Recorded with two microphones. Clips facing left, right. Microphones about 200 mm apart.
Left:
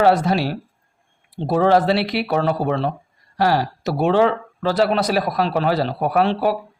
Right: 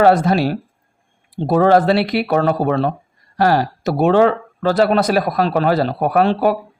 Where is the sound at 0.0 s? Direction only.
50° right (ahead or behind).